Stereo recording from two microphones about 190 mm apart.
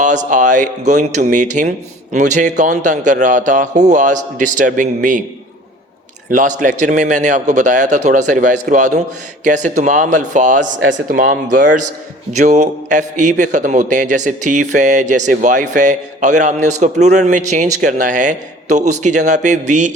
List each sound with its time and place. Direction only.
0.0 s speech: 40° right (ahead or behind)
6.3 s a man's voice: 45° right (ahead or behind)